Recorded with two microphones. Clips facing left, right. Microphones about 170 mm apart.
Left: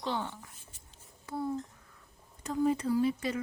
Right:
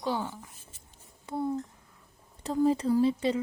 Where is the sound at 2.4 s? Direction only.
30° right (ahead or behind).